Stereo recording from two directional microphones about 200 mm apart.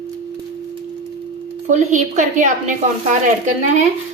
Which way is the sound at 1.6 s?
35° right (ahead or behind).